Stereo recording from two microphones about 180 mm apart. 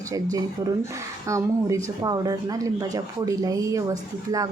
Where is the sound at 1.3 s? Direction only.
15° right (ahead or behind).